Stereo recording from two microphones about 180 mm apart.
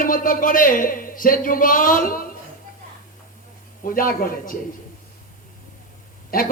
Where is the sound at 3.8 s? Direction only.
50° left (ahead or behind).